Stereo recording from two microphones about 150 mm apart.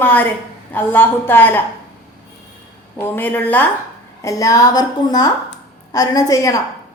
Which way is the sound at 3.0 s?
15° left (ahead or behind).